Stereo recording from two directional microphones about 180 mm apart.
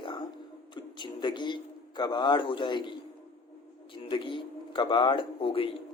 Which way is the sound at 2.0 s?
25° left (ahead or behind).